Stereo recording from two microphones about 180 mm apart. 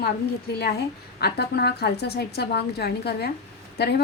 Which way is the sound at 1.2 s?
65° left (ahead or behind).